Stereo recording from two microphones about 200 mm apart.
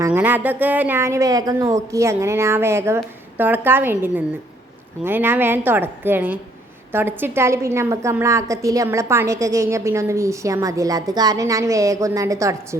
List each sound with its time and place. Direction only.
0.0 s a woman's voice: 10° right (ahead or behind)